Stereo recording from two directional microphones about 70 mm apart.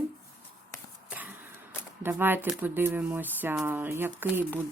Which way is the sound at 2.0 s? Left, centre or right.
Right.